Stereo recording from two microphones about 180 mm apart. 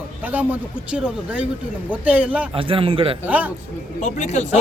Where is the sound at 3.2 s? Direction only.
10° right (ahead or behind).